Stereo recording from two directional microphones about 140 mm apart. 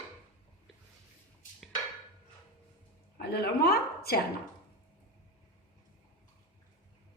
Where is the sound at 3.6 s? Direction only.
90° left.